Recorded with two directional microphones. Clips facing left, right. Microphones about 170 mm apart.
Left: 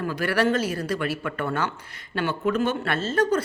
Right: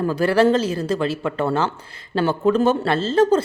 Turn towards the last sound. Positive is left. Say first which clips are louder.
# right 6 dB
turn(degrees=-25)  # may be behind; listen again after turning